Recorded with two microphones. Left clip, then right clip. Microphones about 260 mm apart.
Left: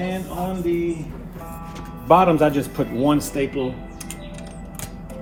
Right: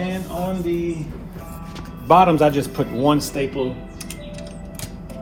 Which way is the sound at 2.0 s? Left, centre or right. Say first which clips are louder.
Right 1 dB; right.